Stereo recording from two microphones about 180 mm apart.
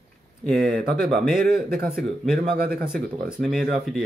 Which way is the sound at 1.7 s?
55° right (ahead or behind).